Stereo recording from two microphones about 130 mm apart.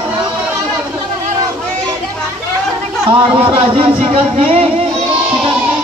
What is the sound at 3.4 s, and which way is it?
Speech, 45° right (ahead or behind).